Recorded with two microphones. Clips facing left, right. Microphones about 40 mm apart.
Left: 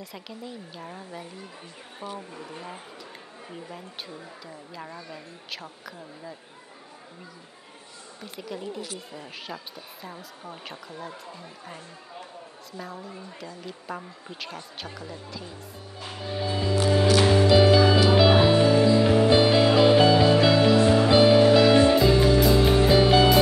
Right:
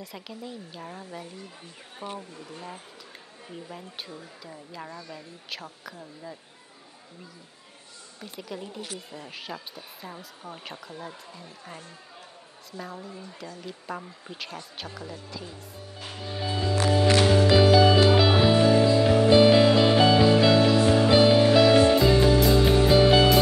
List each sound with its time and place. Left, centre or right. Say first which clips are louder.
0.0 s speech: even; centre
2.0 s speech: even; centre
2.3 s speech: left 2 dB; centre
4.9 s speech: left 1 dB; centre
5.5 s speech: even; centre
8.2 s speech: left 1 dB; centre
12.7 s speech: even; centre
16.0 s music: left 3 dB; centre